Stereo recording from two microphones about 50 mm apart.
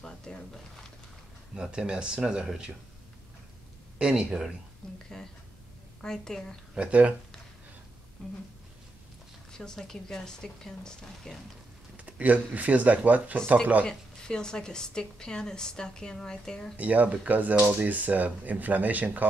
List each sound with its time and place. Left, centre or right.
0.0 s a sound: centre
1.5 s speech: centre
4.0 s speech: centre
5.1 s a woman's voice: centre
6.7 s speech: right
9.5 s a woman's voice: centre
12.0 s speech: right
13.8 s a woman's voice: centre
16.7 s speech: right